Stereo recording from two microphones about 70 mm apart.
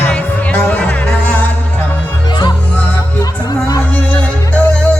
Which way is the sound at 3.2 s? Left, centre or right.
Left.